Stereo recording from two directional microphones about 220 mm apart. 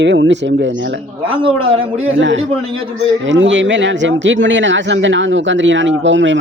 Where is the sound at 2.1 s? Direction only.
55° right (ahead or behind).